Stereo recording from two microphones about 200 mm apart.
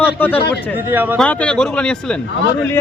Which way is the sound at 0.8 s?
10° right (ahead or behind).